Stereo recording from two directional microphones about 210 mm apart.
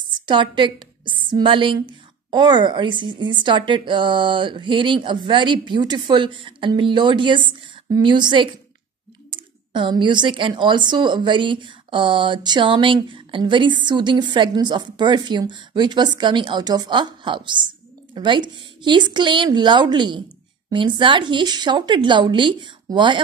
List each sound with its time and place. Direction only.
0.1 s a woman's voice: 20° right (ahead or behind)